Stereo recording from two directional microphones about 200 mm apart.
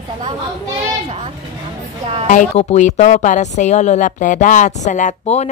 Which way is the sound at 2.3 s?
40° left (ahead or behind).